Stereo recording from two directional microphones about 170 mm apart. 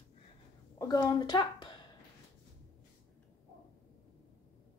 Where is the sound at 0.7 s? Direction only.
15° left (ahead or behind).